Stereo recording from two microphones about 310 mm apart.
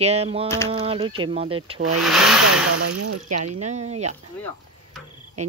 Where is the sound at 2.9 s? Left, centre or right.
Right.